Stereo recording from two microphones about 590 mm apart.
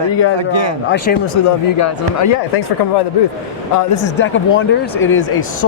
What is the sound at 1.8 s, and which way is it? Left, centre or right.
Speech, left.